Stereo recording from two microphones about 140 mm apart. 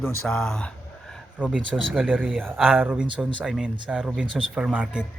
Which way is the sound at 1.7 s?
5° right (ahead or behind).